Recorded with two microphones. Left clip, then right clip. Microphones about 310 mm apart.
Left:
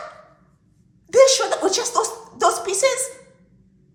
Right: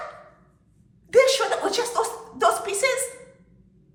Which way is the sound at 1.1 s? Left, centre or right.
Centre.